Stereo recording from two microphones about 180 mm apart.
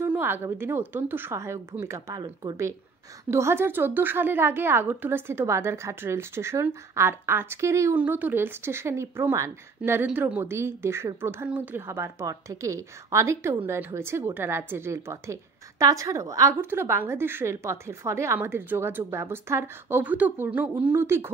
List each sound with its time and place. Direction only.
0.0 s a woman's voice: 10° right (ahead or behind)